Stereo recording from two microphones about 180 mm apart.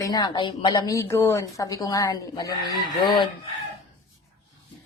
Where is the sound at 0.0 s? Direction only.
20° left (ahead or behind).